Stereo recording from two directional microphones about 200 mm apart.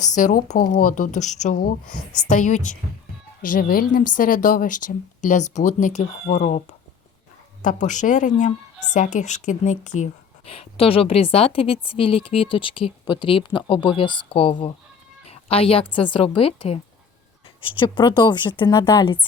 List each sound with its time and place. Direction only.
0.0 s a woman's voice: 35° left (ahead or behind)
7.6 s a woman's voice: 40° left (ahead or behind); by 19.2 s 25° left (ahead or behind)